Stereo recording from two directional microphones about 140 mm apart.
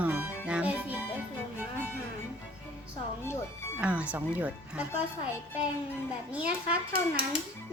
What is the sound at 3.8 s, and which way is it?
Music, 10° right (ahead or behind).